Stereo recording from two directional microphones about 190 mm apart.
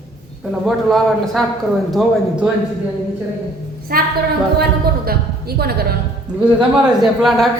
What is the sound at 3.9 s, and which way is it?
A woman's voice, 50° right (ahead or behind).